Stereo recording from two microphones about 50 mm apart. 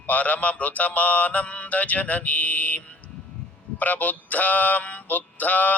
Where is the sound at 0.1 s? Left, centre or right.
Left.